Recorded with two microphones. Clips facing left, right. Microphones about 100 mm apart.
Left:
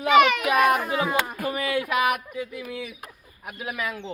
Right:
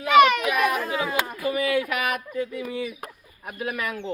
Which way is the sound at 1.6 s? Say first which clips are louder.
Left 4 dB; 20° left (ahead or behind).